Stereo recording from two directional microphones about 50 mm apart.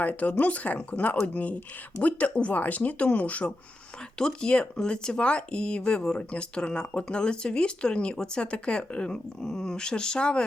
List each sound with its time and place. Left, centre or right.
0.0 s speech: left
4.2 s speech: centre